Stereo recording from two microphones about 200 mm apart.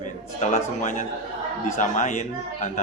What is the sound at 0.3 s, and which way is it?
A man's voice, 35° left (ahead or behind).